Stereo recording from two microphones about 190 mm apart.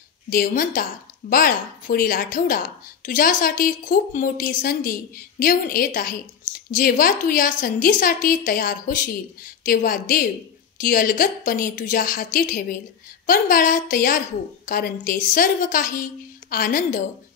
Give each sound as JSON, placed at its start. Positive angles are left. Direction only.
{"t": 0.3, "sound": "speech", "side_deg": 45}